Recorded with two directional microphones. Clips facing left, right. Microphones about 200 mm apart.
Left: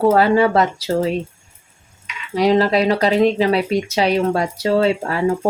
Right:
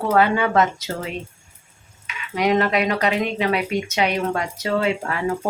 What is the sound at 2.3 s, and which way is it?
Speech, 35° left (ahead or behind).